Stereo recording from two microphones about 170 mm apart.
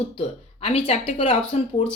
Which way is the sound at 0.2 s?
35° left (ahead or behind).